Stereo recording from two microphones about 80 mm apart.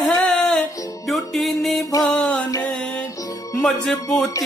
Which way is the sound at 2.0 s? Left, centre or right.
Centre.